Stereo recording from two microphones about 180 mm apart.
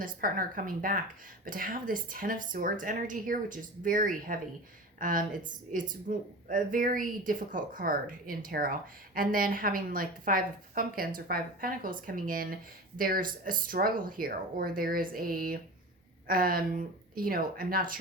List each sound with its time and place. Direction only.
0.0 s a woman's voice: 50° right (ahead or behind)